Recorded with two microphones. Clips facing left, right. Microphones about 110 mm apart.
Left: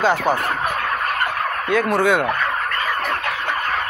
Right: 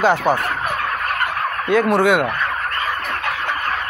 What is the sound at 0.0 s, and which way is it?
Fowl, 15° right (ahead or behind).